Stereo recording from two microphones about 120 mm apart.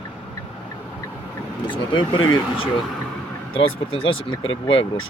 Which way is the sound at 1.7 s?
40° left (ahead or behind).